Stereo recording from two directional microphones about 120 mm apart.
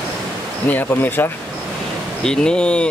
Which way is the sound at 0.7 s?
15° left (ahead or behind).